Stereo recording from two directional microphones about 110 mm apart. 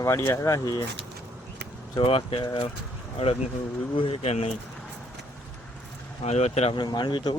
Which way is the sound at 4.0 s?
60° left (ahead or behind).